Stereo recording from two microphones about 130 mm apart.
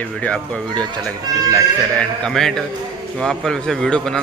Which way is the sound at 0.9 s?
25° right (ahead or behind).